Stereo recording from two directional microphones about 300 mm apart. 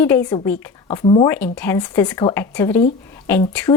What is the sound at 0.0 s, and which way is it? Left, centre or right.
A woman's voice, centre.